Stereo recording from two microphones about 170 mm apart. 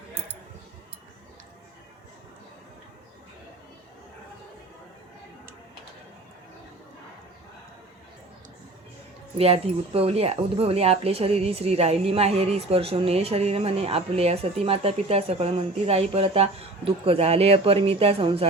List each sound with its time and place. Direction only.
9.4 s speech: 35° right (ahead or behind)